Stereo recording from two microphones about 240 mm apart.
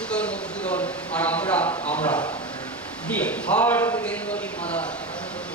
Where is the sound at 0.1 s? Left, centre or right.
Centre.